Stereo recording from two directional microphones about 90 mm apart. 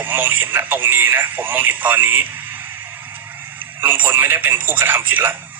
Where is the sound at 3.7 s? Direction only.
20° right (ahead or behind).